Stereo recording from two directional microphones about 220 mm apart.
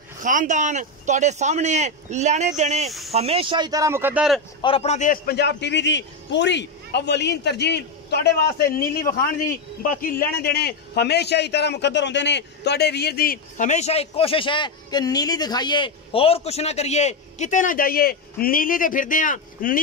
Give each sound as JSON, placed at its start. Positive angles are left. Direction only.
{"t": 0.2, "sound": "speech", "side_deg": -35}
{"t": 4.6, "sound": "a man's voice", "side_deg": 25}